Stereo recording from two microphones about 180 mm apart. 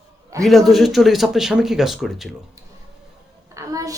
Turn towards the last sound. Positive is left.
turn(degrees=-20)  # may be behind; listen again after turning